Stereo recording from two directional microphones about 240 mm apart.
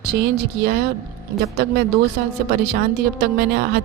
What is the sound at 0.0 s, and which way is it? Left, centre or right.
Speech, right.